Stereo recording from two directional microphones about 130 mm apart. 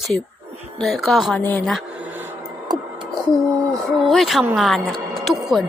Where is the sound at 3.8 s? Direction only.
Centre (ahead or behind).